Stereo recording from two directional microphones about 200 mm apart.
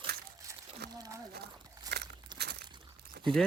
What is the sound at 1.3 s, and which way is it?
Crumpling, 55° right (ahead or behind).